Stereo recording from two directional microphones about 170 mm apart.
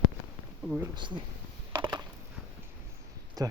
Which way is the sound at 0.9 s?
30° right (ahead or behind).